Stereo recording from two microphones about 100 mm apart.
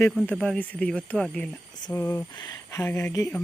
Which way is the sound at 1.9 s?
25° left (ahead or behind).